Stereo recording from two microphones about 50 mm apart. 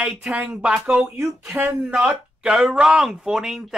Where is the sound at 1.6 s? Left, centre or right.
Right.